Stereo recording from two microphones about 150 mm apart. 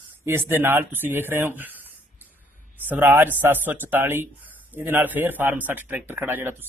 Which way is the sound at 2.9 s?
15° right (ahead or behind).